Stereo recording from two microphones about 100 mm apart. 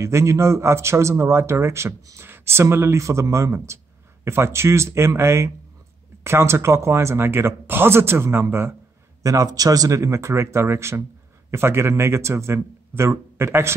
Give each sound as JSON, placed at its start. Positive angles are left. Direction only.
{"t": 0.0, "sound": "a man's voice", "side_deg": -30}
{"t": 9.2, "sound": "a man's voice", "side_deg": -35}